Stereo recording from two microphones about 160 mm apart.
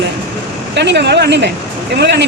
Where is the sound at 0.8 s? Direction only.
90° right.